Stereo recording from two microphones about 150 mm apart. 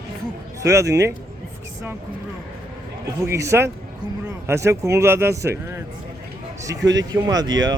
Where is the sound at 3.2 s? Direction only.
20° right (ahead or behind).